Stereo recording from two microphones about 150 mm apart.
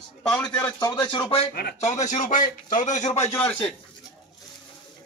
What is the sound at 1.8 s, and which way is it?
Speech, 50° left (ahead or behind).